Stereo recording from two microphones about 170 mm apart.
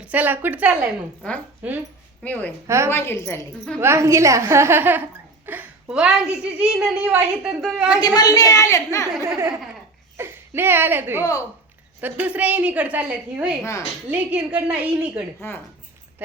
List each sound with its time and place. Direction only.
0.0 s a woman's voice: 10° right (ahead or behind)
1.2 s a woman's voice: 5° left (ahead or behind)
1.6 s a woman's voice: 10° right (ahead or behind)
2.2 s a woman's voice: 10° left (ahead or behind)
2.6 s a woman's voice: 15° right (ahead or behind)
2.9 s a woman's voice: 15° left (ahead or behind)
3.8 s a woman's voice: 15° right (ahead or behind)
8.0 s a woman's voice: 20° left (ahead or behind)
9.2 s a woman's voice: 15° right (ahead or behind)
15.4 s a woman's voice: 15° left (ahead or behind)